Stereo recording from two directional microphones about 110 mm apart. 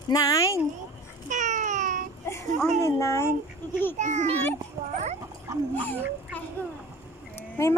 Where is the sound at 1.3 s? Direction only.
90° right.